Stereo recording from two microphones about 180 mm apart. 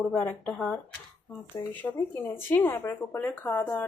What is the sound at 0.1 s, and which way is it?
Speech, 5° left (ahead or behind).